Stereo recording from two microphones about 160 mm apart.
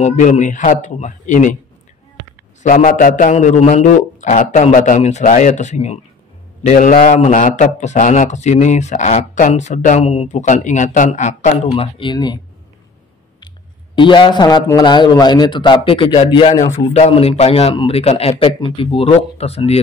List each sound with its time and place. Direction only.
0.0 s a man's voice: 50° left (ahead or behind)
2.6 s a man's voice: 55° left (ahead or behind); by 12.4 s 30° left (ahead or behind)
13.9 s a man's voice: 30° left (ahead or behind)